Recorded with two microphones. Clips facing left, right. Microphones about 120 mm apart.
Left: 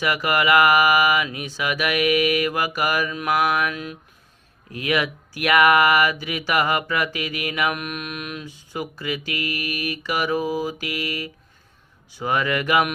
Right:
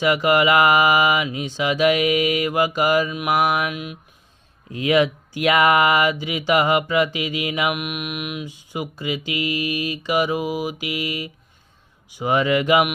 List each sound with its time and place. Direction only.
0.0 s speech: 20° right (ahead or behind)
4.7 s speech: 25° right (ahead or behind)